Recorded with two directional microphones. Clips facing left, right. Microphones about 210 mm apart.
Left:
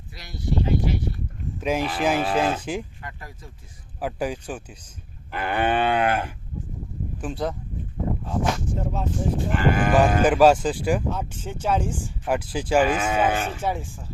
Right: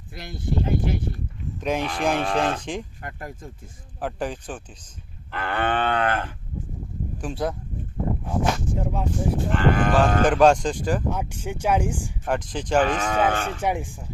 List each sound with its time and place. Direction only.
0.1 s speech: 50° right (ahead or behind)
1.5 s speech: 5° left (ahead or behind)
3.0 s speech: 50° right (ahead or behind)
4.0 s speech: 10° left (ahead or behind)
7.2 s speech: centre (ahead or behind)
8.8 s speech: 10° right (ahead or behind)
9.5 s speech: 10° left (ahead or behind)
11.1 s speech: 10° right (ahead or behind)
12.2 s speech: 10° left (ahead or behind)
13.6 s speech: 15° right (ahead or behind)